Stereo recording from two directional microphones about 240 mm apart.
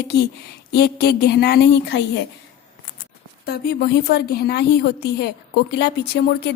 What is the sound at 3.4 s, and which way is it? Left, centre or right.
Speech, left.